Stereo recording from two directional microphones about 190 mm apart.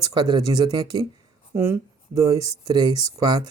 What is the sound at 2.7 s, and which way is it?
Speech, 20° right (ahead or behind).